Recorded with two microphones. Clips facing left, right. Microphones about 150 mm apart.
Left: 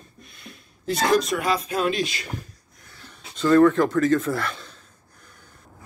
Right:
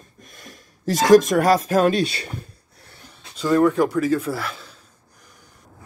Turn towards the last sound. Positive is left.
turn(degrees=-5)  # may be behind; listen again after turning